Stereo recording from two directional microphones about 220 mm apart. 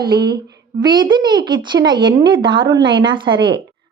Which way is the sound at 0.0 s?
20° right (ahead or behind).